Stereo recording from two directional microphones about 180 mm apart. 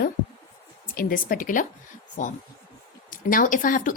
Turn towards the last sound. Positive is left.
turn(degrees=50)  # may be behind; listen again after turning